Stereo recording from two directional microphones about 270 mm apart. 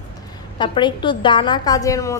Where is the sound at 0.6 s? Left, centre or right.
Centre.